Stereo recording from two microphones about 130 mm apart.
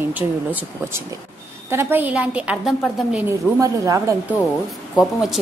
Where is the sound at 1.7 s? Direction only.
20° right (ahead or behind).